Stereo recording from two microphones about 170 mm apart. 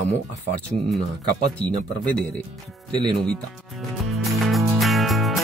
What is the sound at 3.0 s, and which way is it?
Speech, 5° left (ahead or behind).